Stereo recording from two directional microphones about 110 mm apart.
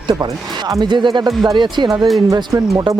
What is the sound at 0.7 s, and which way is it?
Speech, 45° right (ahead or behind).